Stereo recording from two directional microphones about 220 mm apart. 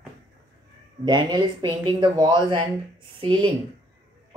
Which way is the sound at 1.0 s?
20° right (ahead or behind).